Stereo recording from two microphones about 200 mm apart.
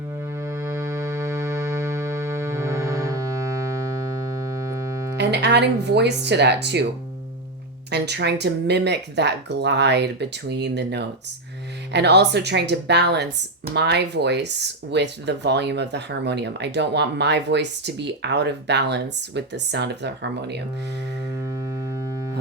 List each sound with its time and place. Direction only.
0.4 s music: 15° right (ahead or behind)
5.1 s speech: 55° right (ahead or behind)
7.9 s speech: 55° right (ahead or behind)